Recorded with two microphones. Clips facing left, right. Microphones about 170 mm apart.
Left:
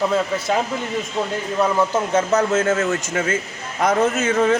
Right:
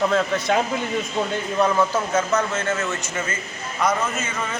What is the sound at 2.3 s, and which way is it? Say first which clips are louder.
Speech: left 5 dB; 45° left (ahead or behind).